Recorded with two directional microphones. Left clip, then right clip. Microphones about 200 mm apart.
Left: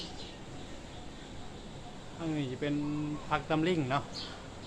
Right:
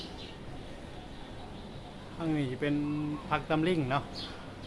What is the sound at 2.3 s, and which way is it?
Speech, 15° right (ahead or behind).